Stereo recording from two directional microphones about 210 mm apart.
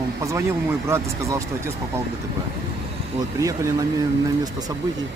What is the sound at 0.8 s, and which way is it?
Speech, 15° right (ahead or behind).